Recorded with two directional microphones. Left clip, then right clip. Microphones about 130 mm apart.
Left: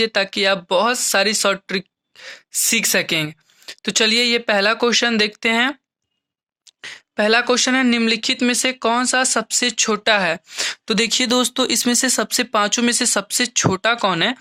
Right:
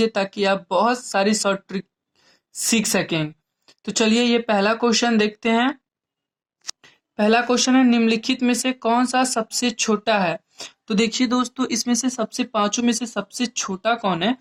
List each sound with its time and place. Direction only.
0.0 s speech: 10° left (ahead or behind)
6.8 s speech: 20° left (ahead or behind)